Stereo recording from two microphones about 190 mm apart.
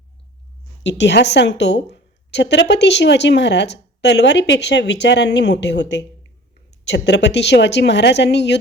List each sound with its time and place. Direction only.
0.8 s a woman's voice: 70° left (ahead or behind)